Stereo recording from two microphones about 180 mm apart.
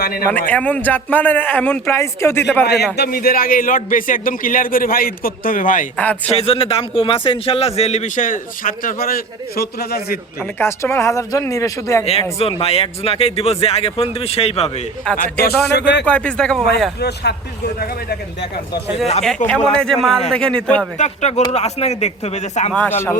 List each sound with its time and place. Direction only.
0.3 s a man's voice: 10° left (ahead or behind)
2.9 s a man's voice: 60° left (ahead or behind)
6.0 s a man's voice: 10° left (ahead or behind)
6.3 s speech: 35° left (ahead or behind); by 10.2 s 60° left (ahead or behind)
10.6 s a man's voice: 15° left (ahead or behind)
12.4 s speech: 30° left (ahead or behind)
15.2 s a man's voice: 60° left (ahead or behind)
15.7 s speech: 75° left (ahead or behind)
16.0 s speech: 5° left (ahead or behind)
17.0 s speech: 65° left (ahead or behind)
19.5 s speech: 5° left (ahead or behind)
21.0 s speech: 40° left (ahead or behind)
22.7 s a man's voice: 10° left (ahead or behind)